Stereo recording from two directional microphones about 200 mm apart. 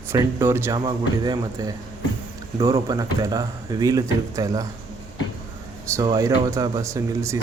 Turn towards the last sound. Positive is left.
turn(degrees=-15)  # may be behind; listen again after turning